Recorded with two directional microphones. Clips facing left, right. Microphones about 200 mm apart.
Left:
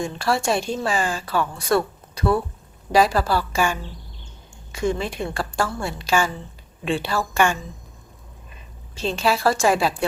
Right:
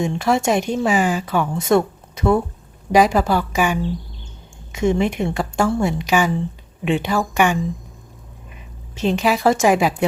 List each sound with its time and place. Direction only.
0.2 s a woman's voice: 20° right (ahead or behind)
9.0 s a woman's voice: 15° right (ahead or behind)